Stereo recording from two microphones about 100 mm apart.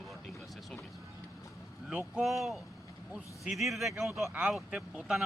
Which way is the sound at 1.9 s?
10° right (ahead or behind).